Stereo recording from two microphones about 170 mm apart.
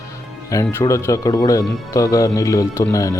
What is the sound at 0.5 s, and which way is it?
Speech, 20° left (ahead or behind).